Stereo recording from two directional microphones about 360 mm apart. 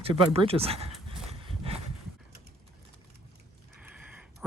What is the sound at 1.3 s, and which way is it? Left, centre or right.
Horse, centre.